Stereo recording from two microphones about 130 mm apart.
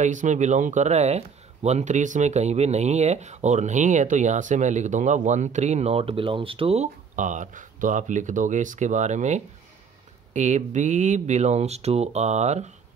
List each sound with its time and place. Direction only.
0.0 s speech: 70° right (ahead or behind); by 6.9 s 50° right (ahead or behind)
7.2 s speech: 75° right (ahead or behind); by 12.7 s 60° right (ahead or behind)